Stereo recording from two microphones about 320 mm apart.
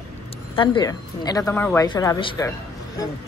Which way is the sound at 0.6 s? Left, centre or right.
Centre.